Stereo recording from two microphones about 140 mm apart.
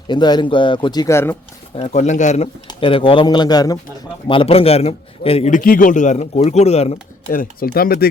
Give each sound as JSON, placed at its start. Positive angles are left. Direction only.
{"t": 0.1, "sound": "speech", "side_deg": 30}
{"t": 1.1, "sound": "speech", "side_deg": 15}
{"t": 1.7, "sound": "speech", "side_deg": 50}
{"t": 2.6, "sound": "speech", "side_deg": 35}
{"t": 4.3, "sound": "a man's voice", "side_deg": 40}
{"t": 5.5, "sound": "speech", "side_deg": 80}
{"t": 7.3, "sound": "speech", "side_deg": 85}